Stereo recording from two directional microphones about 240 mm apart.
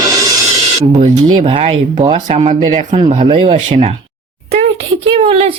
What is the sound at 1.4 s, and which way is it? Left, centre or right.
Speech, right.